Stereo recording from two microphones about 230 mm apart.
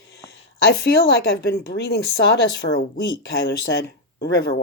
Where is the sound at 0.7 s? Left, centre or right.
Left.